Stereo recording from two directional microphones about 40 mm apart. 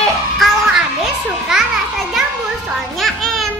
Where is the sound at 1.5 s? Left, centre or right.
Centre.